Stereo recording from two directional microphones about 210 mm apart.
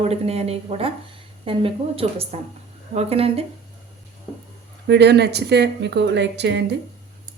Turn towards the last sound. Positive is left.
turn(degrees=-55)  # may be behind; listen again after turning